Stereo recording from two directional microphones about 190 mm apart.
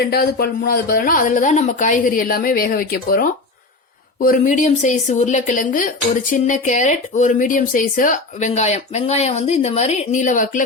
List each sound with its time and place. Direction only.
0.0 s speech: 55° left (ahead or behind)